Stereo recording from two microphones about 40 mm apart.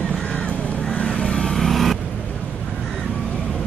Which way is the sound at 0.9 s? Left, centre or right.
Left.